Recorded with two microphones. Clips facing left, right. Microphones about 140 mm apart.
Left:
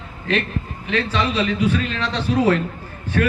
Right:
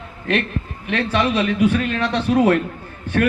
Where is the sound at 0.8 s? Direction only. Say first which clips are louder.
Right 2 dB; 50° right (ahead or behind).